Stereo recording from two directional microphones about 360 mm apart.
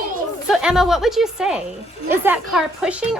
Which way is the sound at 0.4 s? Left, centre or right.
Centre.